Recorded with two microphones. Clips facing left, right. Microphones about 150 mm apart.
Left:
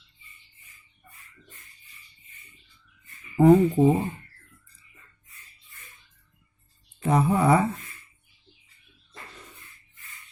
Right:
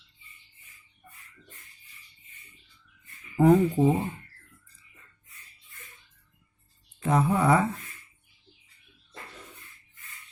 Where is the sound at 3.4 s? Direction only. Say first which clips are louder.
Left 3 dB; 5° left (ahead or behind).